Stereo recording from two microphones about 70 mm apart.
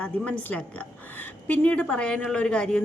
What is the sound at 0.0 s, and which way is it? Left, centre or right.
A woman's voice, centre.